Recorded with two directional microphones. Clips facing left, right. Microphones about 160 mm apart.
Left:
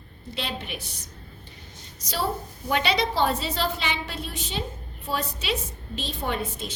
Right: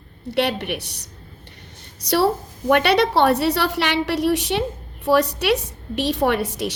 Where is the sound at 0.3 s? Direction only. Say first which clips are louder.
Right 11 dB; 65° right (ahead or behind).